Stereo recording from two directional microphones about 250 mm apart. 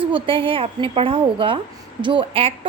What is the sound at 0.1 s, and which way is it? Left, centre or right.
Speech, right.